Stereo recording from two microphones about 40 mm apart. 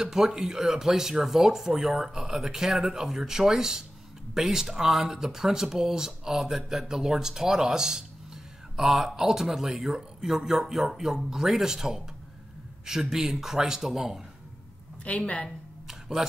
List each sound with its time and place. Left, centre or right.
0.0 s speech: centre
15.0 s a woman's voice: left
15.9 s a sound: centre